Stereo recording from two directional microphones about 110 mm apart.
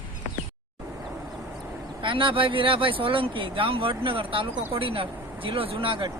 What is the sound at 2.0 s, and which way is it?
Speech, 50° right (ahead or behind).